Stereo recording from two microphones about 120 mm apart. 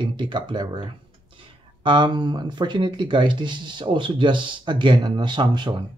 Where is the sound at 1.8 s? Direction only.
40° right (ahead or behind).